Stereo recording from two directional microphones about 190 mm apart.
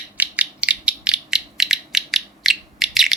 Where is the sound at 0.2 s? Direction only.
5° right (ahead or behind).